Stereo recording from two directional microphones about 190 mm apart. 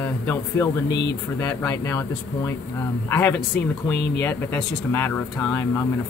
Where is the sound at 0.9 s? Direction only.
65° left (ahead or behind).